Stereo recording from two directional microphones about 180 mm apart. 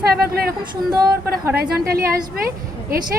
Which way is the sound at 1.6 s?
55° right (ahead or behind).